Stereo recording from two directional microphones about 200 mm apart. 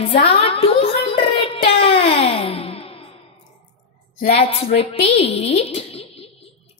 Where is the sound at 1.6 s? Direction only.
30° left (ahead or behind).